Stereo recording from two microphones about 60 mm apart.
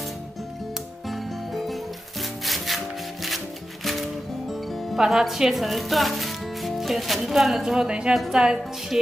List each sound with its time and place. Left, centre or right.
1.0 s music: centre
3.8 s music: centre
8.1 s a woman's voice: centre